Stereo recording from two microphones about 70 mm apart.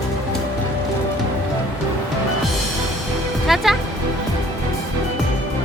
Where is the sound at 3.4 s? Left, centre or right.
Centre.